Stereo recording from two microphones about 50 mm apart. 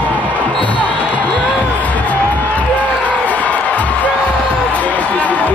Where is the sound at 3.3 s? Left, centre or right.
Left.